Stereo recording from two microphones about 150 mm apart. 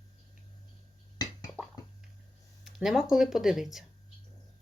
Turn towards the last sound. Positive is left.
turn(degrees=-5)  # may be behind; listen again after turning